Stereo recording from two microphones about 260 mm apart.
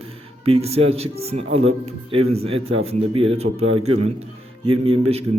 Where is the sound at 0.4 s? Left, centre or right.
Right.